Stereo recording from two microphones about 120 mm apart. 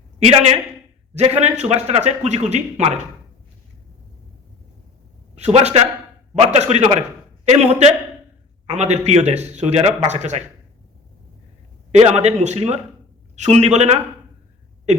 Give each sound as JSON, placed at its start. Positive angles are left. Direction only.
{"t": 1.1, "sound": "speech", "side_deg": -65}
{"t": 5.3, "sound": "a man's voice", "side_deg": -65}
{"t": 11.9, "sound": "speech", "side_deg": -70}